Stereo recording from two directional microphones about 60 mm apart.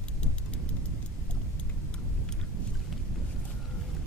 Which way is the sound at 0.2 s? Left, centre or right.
Centre.